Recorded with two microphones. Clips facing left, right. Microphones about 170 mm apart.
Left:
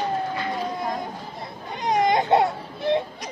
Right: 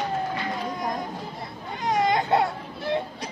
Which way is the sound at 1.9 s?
20° left (ahead or behind).